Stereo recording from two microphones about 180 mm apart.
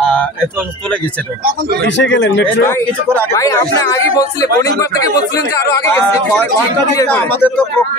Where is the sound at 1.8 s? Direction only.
80° left.